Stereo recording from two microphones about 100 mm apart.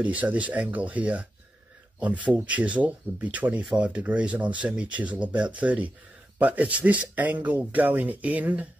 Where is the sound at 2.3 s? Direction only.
15° right (ahead or behind).